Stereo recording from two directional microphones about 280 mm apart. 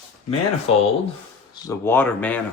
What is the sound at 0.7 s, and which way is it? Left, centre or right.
Speech, left.